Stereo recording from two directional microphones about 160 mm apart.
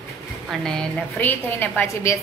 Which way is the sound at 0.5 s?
5° left (ahead or behind).